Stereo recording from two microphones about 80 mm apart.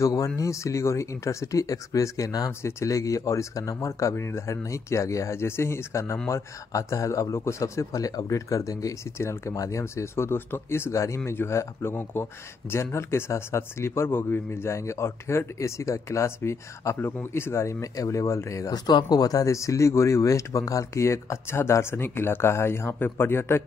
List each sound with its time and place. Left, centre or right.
0.0 s speech: left
4.1 s speech: left
18.9 s speech: left